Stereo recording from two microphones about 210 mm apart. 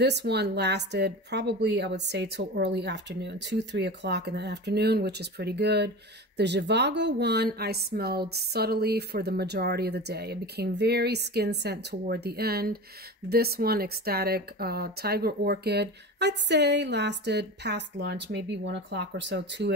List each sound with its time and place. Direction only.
0.0 s a woman's voice: 55° right (ahead or behind)